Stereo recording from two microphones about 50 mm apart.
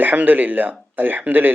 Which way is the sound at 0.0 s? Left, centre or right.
Right.